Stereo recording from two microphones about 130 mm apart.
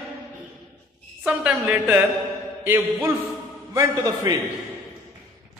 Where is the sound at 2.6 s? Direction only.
20° right (ahead or behind).